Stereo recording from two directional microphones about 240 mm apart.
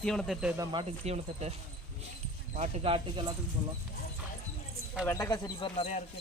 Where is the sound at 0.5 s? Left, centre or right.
Centre.